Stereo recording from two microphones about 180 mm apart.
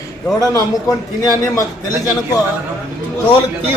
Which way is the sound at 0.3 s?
20° left (ahead or behind).